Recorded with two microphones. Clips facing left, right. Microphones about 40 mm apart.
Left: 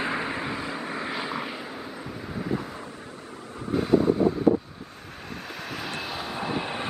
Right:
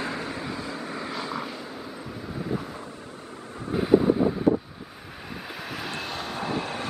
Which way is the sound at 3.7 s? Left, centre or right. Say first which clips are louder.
Right 1 dB; centre.